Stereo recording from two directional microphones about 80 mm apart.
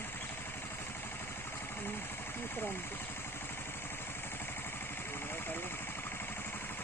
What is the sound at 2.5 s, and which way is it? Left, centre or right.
Speech, left.